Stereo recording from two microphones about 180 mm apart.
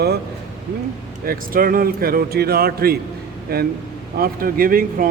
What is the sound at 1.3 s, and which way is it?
A man's voice, 55° right (ahead or behind).